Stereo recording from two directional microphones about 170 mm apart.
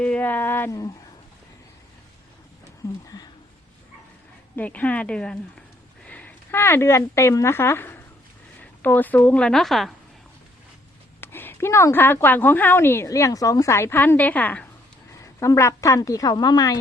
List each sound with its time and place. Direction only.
0.0 s speech: 10° left (ahead or behind)
4.5 s speech: 10° left (ahead or behind)
11.2 s a woman's voice: 10° left (ahead or behind)